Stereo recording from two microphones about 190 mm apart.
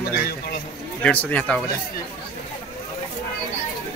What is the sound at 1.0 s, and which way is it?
Speech, 5° left (ahead or behind).